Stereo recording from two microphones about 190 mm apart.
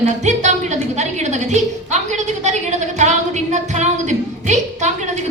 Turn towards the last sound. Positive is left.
turn(degrees=-40)  # may be behind; listen again after turning